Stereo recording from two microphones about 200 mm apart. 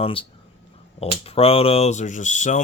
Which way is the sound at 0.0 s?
25° left (ahead or behind).